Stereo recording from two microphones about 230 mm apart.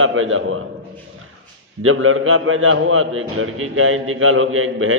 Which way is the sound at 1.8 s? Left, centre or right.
Right.